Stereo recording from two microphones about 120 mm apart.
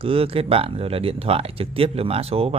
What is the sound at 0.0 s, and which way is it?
Speech, 50° right (ahead or behind).